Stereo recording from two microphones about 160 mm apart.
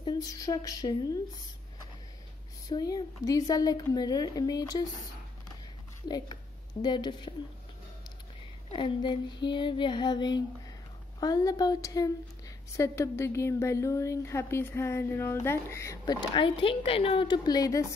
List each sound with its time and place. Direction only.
0.0 s speech: 25° left (ahead or behind)
2.7 s a woman's voice: 25° left (ahead or behind)
8.7 s a woman's voice: 30° left (ahead or behind)